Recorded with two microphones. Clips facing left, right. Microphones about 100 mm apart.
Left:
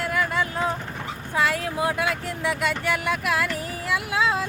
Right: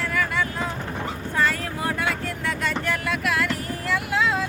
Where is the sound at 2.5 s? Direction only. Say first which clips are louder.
Left 2 dB; 10° left (ahead or behind).